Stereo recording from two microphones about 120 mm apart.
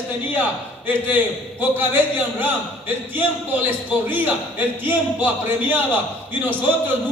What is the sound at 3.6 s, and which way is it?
A man's voice, 15° right (ahead or behind).